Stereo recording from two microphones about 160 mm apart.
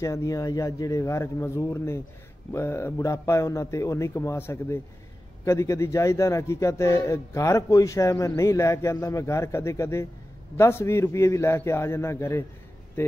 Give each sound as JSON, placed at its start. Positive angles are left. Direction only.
{"t": 0.0, "sound": "a man's voice", "side_deg": 20}